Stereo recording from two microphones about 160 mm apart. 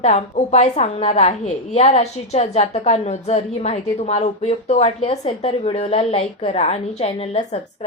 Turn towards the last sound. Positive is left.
turn(degrees=40)  # may be behind; listen again after turning